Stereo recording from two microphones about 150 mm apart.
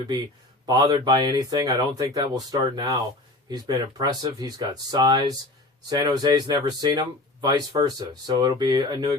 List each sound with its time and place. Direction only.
0.6 s speech: 25° right (ahead or behind)